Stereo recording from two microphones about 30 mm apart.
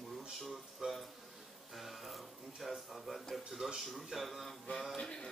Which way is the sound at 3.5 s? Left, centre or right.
Centre.